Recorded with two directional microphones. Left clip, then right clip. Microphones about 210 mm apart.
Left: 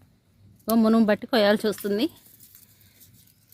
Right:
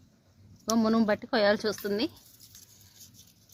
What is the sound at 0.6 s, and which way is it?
Speech, 35° left (ahead or behind).